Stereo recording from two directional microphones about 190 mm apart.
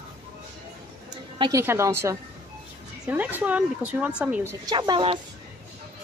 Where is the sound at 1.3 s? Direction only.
20° right (ahead or behind); by 4.5 s 5° right (ahead or behind).